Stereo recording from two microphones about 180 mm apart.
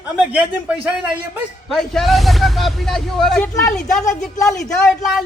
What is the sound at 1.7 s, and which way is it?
Speech, centre (ahead or behind).